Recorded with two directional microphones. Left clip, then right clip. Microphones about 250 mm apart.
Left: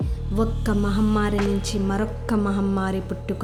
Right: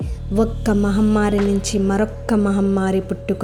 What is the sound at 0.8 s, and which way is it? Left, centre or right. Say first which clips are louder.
A woman's voice: right 4 dB; centre.